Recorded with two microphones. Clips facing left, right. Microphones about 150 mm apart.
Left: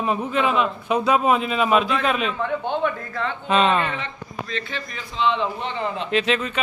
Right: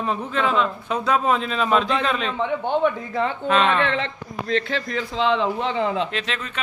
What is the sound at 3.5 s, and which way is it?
Speech, 15° left (ahead or behind).